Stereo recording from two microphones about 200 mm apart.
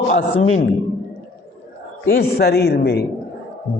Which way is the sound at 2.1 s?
50° left (ahead or behind).